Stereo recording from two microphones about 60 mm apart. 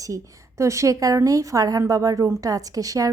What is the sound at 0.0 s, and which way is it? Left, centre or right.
A woman's voice, right.